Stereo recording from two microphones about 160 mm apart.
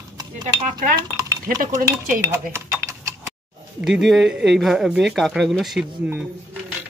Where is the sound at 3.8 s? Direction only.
Centre (ahead or behind).